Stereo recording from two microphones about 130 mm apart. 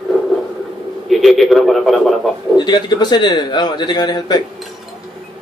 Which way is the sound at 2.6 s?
35° left (ahead or behind).